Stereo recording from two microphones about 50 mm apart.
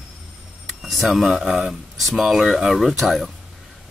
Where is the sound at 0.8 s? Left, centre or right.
Centre.